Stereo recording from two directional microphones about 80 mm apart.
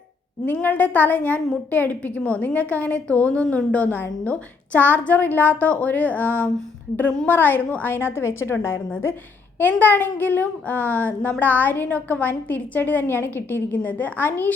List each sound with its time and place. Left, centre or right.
0.4 s a child's voice: left
9.6 s a child's voice: left